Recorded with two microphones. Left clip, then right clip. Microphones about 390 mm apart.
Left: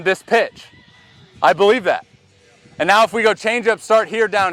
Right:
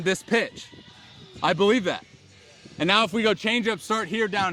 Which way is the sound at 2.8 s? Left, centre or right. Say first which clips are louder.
Left 8 dB; left.